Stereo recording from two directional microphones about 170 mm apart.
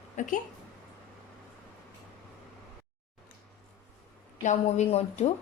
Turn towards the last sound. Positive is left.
turn(degrees=40)  # may be behind; listen again after turning